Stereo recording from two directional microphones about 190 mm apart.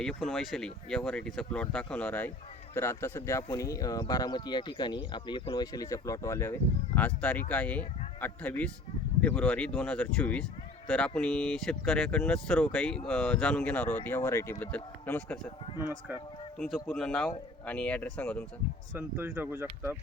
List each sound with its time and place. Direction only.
0.0 s speech: 5° left (ahead or behind)
15.6 s speech: 25° left (ahead or behind)
16.6 s speech: 5° left (ahead or behind)
18.9 s speech: 10° right (ahead or behind)